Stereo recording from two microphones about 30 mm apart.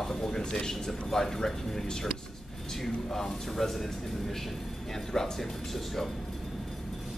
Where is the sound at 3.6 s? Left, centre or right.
Centre.